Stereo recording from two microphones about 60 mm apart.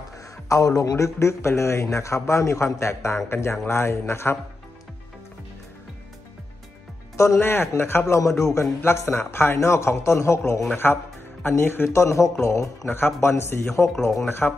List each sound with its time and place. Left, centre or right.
0.5 s a man's voice: left
7.3 s a man's voice: left
8.2 s a man's voice: left
11.4 s a man's voice: left
12.8 s a man's voice: left